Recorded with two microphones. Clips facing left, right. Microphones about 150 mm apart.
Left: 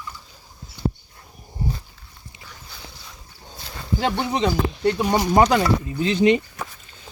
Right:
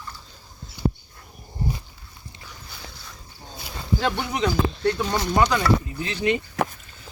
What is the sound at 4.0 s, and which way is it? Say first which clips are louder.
Speech: left 3 dB; 20° left (ahead or behind).